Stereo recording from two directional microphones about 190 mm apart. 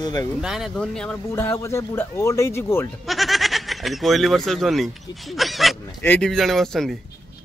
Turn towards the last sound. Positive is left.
turn(degrees=0)  # may be behind; listen again after turning